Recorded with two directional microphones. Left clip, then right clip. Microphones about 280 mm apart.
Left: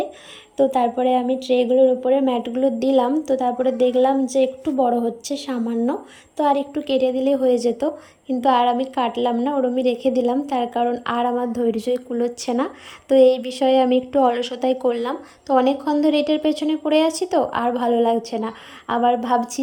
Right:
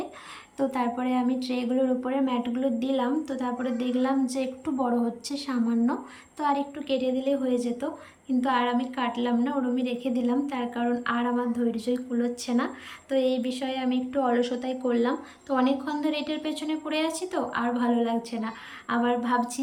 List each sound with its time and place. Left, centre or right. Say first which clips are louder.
0.5 s a woman's voice: left 10 dB; centre